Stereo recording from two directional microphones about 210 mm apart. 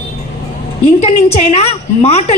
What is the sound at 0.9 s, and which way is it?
A woman's voice, 30° left (ahead or behind).